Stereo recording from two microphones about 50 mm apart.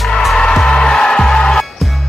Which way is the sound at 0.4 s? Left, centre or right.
Centre.